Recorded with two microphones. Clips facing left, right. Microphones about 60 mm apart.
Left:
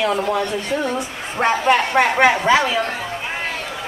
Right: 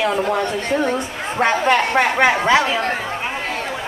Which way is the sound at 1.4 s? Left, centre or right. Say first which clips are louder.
Even; centre.